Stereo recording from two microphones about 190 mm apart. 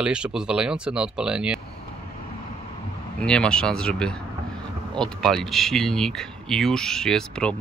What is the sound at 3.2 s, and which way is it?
Speech, 5° left (ahead or behind).